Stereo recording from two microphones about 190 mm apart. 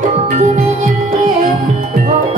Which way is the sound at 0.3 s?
45° right (ahead or behind).